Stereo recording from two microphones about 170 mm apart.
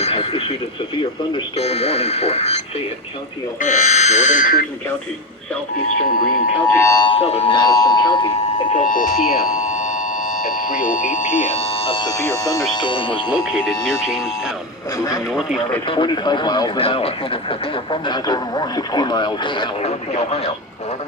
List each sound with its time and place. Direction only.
0.0 s radio: 35° left (ahead or behind)
1.2 s speech: 30° left (ahead or behind)
3.6 s speech: 45° left (ahead or behind)
6.1 s speech: 60° left (ahead or behind)
6.7 s speech: 15° left (ahead or behind)
7.1 s speech: 40° left (ahead or behind)
7.5 s speech: 20° left (ahead or behind)
8.7 s speech: 50° left (ahead or behind); by 13.3 s 30° left (ahead or behind)
13.3 s speech: centre (ahead or behind)
14.9 s speech: 20° left (ahead or behind)
15.3 s speech: centre (ahead or behind)
15.9 s speech: 30° left (ahead or behind)